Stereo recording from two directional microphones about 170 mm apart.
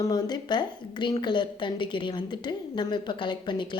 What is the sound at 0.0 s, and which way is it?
A woman's voice, 25° left (ahead or behind).